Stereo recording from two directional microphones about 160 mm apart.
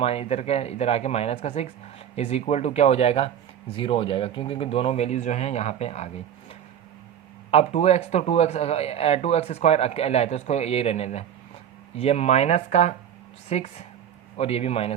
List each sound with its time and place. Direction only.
0.0 s speech: 40° left (ahead or behind)
7.5 s speech: 40° left (ahead or behind)